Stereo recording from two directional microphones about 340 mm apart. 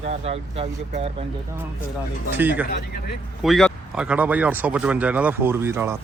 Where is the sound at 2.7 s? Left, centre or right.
Left.